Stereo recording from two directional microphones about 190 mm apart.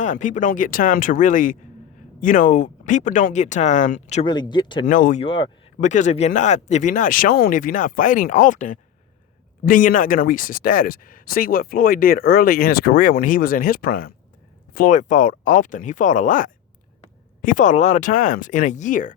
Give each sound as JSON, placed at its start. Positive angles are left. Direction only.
{"t": 0.0, "sound": "speech", "side_deg": 40}
{"t": 4.3, "sound": "speech", "side_deg": 25}
{"t": 4.9, "sound": "speech", "side_deg": 45}
{"t": 5.2, "sound": "speech", "side_deg": 25}
{"t": 5.8, "sound": "speech", "side_deg": 40}